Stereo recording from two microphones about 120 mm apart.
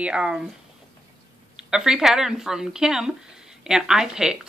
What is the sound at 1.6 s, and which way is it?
Speech, 5° right (ahead or behind).